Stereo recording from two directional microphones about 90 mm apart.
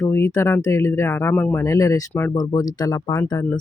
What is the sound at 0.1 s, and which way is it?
Speech, 30° left (ahead or behind).